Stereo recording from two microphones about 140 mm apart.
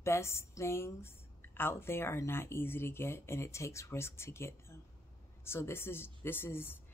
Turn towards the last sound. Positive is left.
turn(degrees=15)  # may be behind; listen again after turning